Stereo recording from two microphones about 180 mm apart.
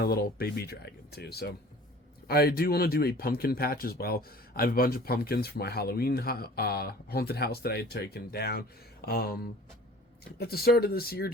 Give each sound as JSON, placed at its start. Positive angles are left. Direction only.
{"t": 0.0, "sound": "speech", "side_deg": 60}